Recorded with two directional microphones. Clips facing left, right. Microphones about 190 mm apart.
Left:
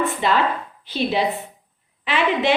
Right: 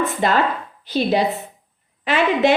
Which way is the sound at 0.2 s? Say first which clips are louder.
Right 3 dB; 45° right (ahead or behind).